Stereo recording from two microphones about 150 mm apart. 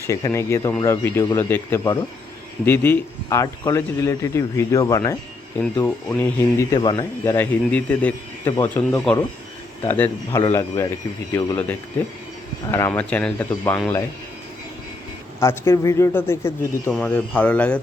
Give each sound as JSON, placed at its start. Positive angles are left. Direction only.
{"t": 0.1, "sound": "a man's voice", "side_deg": 20}
{"t": 5.6, "sound": "a man's voice", "side_deg": 10}
{"t": 7.3, "sound": "speech", "side_deg": 10}
{"t": 8.4, "sound": "a man's voice", "side_deg": 30}
{"t": 8.7, "sound": "speech", "side_deg": 10}
{"t": 15.4, "sound": "speech", "side_deg": 20}